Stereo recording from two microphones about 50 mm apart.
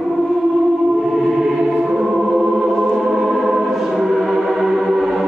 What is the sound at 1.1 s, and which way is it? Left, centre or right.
Music, centre.